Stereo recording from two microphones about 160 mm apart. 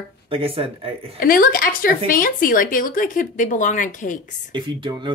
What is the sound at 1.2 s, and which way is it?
Speech, 65° left (ahead or behind).